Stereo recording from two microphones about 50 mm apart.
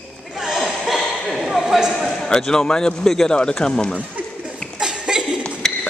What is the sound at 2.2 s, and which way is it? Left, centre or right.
A man's voice, centre.